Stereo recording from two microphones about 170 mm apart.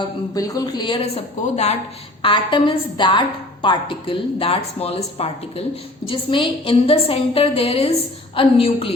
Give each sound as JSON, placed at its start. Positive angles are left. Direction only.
{"t": 0.3, "sound": "speech", "side_deg": 20}
{"t": 1.0, "sound": "a woman's voice", "side_deg": 40}
{"t": 2.2, "sound": "a woman's voice", "side_deg": 30}